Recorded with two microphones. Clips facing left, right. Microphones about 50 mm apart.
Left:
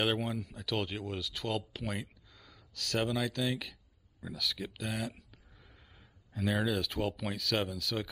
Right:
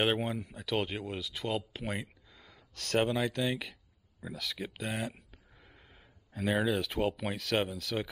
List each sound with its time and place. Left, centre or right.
0.0 s speech: right